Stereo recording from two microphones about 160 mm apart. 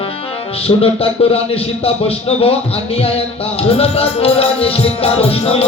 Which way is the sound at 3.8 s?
35° left (ahead or behind).